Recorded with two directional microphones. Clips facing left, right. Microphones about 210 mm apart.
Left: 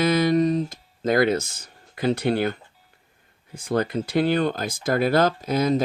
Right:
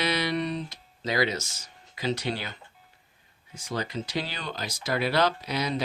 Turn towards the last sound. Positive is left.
turn(degrees=50)  # may be behind; listen again after turning